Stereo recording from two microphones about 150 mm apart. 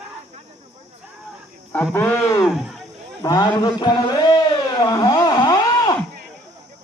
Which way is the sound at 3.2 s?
25° left (ahead or behind).